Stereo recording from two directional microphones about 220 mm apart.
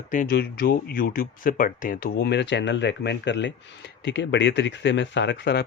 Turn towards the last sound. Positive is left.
turn(degrees=50)  # may be behind; listen again after turning